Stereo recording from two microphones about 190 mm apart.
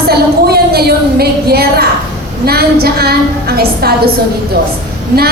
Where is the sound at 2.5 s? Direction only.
55° right (ahead or behind).